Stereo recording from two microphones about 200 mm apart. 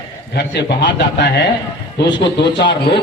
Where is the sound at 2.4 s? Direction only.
60° left (ahead or behind).